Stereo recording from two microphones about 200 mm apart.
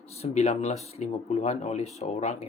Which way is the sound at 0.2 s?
35° left (ahead or behind).